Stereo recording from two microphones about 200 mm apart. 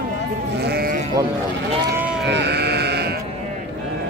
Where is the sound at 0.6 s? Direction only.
55° right (ahead or behind).